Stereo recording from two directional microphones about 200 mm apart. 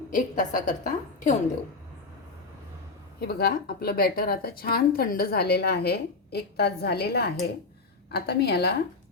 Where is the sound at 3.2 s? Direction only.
50° left (ahead or behind).